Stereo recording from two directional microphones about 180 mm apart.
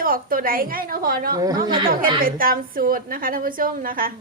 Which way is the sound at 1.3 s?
25° right (ahead or behind).